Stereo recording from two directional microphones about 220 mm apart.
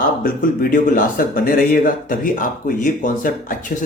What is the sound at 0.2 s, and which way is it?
Speech, 40° left (ahead or behind).